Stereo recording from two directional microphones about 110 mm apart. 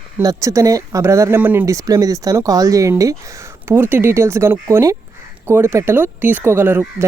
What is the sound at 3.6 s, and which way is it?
Speech, 20° right (ahead or behind).